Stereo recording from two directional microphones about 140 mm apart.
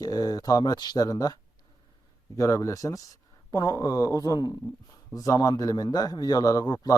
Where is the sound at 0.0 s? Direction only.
25° left (ahead or behind).